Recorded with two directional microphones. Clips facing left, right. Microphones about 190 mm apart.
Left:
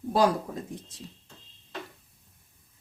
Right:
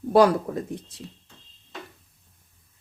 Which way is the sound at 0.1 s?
65° right (ahead or behind).